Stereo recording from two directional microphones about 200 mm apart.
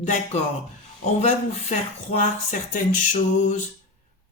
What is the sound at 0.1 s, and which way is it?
Speech, 35° left (ahead or behind).